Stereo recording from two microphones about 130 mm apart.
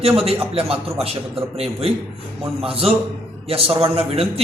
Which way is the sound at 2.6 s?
50° right (ahead or behind).